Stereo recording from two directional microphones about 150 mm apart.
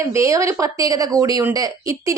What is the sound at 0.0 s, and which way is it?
A woman's voice, 20° right (ahead or behind).